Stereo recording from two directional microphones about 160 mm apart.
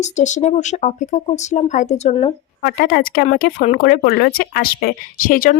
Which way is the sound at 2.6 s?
65° left (ahead or behind).